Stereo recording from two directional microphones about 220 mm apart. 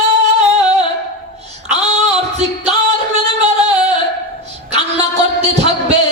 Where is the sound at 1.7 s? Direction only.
30° right (ahead or behind).